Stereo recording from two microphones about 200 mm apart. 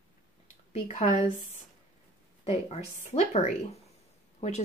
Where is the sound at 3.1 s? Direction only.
35° left (ahead or behind).